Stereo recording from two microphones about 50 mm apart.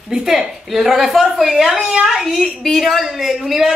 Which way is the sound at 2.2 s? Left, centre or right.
Centre.